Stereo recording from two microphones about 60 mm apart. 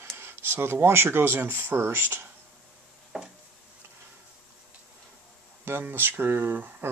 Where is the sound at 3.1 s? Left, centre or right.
Centre.